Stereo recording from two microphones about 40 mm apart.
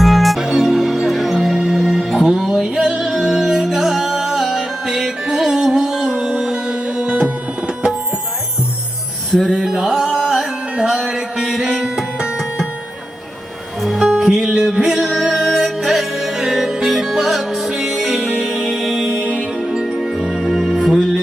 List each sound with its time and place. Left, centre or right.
0.0 s music: centre
0.3 s music: centre; by 7.3 s right
9.5 s music: centre
14.0 s music: centre
19.2 s music: right
19.6 s music: centre